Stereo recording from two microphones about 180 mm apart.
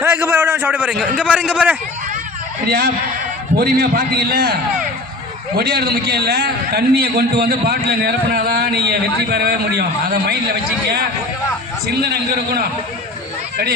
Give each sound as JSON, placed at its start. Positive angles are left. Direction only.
{"t": 0.0, "sound": "a man's voice", "side_deg": -10}
{"t": 2.6, "sound": "a man's voice", "side_deg": -60}